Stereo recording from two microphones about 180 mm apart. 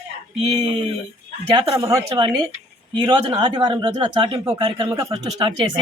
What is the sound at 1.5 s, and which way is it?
Speech, 20° right (ahead or behind).